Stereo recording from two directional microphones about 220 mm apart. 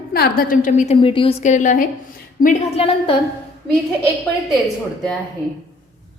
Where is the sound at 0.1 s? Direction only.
45° left (ahead or behind); by 3.2 s 25° left (ahead or behind).